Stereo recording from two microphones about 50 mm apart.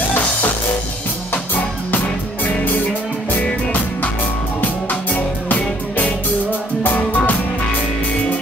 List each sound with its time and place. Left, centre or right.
2.4 s music: left
4.6 s music: left